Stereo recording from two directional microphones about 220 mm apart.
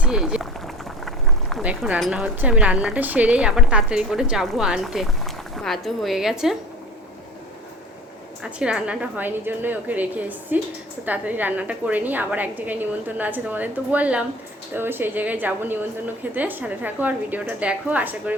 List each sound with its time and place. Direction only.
0.0 s a sound: 5° right (ahead or behind)
1.0 s speech: centre (ahead or behind)
8.4 s a woman's voice: 5° right (ahead or behind)